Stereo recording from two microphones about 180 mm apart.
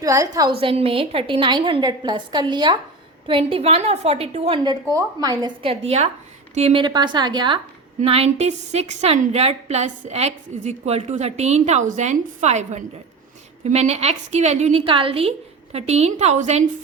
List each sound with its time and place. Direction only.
0.0 s a woman's voice: 20° right (ahead or behind)
0.6 s a woman's voice: 30° right (ahead or behind)
5.8 s a woman's voice: 35° right (ahead or behind)